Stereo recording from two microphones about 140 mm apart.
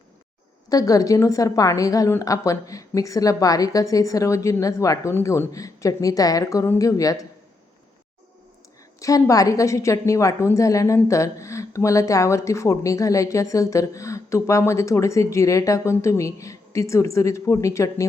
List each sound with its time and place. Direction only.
0.7 s a woman's voice: 25° left (ahead or behind)
9.0 s a woman's voice: 25° left (ahead or behind)